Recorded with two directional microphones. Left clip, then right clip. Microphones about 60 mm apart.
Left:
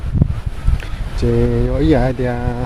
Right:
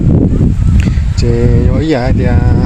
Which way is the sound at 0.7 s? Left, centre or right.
Centre.